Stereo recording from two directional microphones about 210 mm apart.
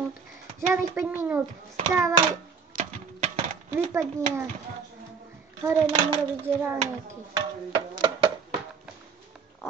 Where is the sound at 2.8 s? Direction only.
35° right (ahead or behind).